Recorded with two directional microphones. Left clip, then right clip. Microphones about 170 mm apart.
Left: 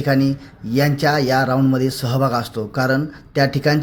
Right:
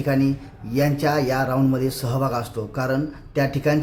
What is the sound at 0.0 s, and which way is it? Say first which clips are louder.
Speech: left 3 dB; 20° left (ahead or behind).